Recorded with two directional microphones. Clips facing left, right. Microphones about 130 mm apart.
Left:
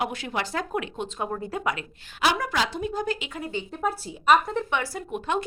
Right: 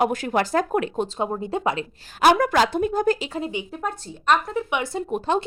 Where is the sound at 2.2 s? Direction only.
50° right (ahead or behind).